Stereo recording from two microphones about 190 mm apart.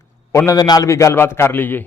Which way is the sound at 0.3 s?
20° left (ahead or behind).